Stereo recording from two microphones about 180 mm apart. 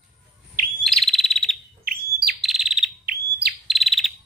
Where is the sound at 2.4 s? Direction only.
Centre (ahead or behind).